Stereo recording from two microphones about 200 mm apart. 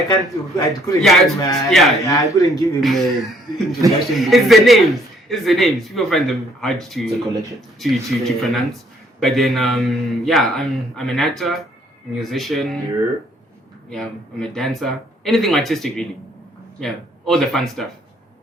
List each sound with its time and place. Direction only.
0.0 s speech: centre (ahead or behind)
2.0 s speech: 15° left (ahead or behind)
2.8 s speech: centre (ahead or behind)
13.9 s speech: 5° left (ahead or behind)